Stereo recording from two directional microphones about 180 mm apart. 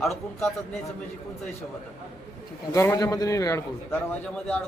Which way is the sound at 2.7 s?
15° left (ahead or behind).